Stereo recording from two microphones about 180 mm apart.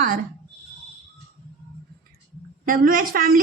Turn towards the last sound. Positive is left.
turn(degrees=-55)  # may be behind; listen again after turning